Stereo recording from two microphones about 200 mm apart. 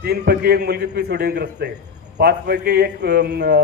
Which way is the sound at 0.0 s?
50° right (ahead or behind).